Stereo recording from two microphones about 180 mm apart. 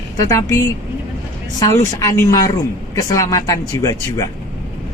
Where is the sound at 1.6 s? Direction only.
20° left (ahead or behind).